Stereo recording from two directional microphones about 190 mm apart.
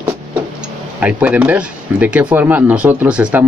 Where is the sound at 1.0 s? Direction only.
10° right (ahead or behind).